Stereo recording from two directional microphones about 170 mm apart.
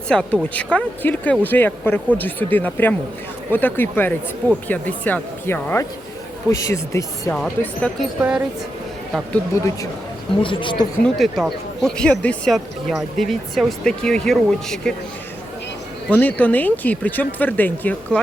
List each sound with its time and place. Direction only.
0.1 s speech: 5° left (ahead or behind)
7.3 s speech: 5° left (ahead or behind)
8.2 s speech: 10° right (ahead or behind)
9.5 s speech: 15° left (ahead or behind)
10.4 s speech: 30° left (ahead or behind)
11.0 s speech: centre (ahead or behind)
16.0 s speech: 10° left (ahead or behind)